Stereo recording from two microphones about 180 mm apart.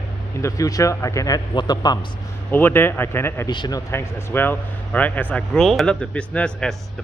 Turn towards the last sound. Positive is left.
turn(degrees=5)  # may be behind; listen again after turning